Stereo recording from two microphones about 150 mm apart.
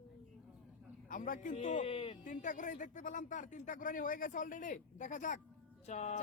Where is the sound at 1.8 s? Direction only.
40° left (ahead or behind).